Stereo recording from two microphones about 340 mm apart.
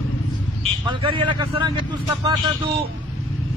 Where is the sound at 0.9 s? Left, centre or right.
Centre.